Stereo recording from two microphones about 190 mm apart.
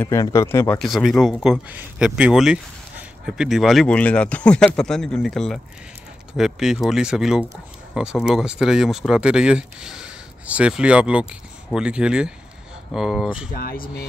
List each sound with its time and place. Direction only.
0.0 s speech: 15° left (ahead or behind)
0.7 s speech: centre (ahead or behind)
13.5 s speech: 50° left (ahead or behind)